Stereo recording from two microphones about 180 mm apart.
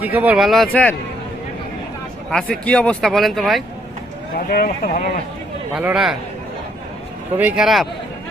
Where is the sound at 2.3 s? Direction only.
5° left (ahead or behind).